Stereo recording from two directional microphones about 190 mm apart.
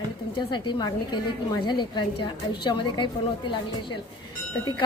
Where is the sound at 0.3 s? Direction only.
25° left (ahead or behind).